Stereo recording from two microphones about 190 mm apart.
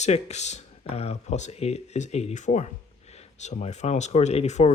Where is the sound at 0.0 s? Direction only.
35° left (ahead or behind).